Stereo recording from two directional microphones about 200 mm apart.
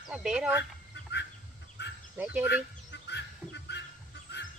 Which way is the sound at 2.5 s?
60° left (ahead or behind).